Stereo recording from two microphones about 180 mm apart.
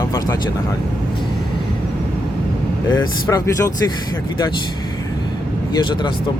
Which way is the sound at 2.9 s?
20° left (ahead or behind).